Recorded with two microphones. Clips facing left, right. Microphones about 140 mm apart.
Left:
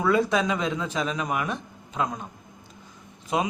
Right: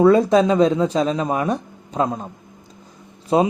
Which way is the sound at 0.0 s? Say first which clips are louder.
Right 9 dB; 35° right (ahead or behind).